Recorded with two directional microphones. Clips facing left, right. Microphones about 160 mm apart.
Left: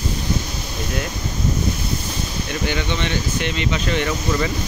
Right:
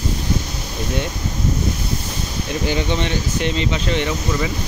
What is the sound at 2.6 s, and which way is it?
Speech, 35° right (ahead or behind).